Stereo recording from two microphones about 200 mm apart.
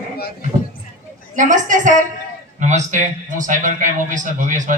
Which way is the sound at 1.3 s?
40° right (ahead or behind).